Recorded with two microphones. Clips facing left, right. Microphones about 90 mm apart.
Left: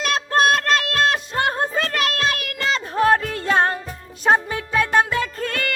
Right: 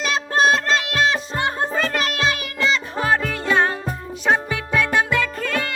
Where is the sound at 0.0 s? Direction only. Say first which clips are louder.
Even; 50° left (ahead or behind).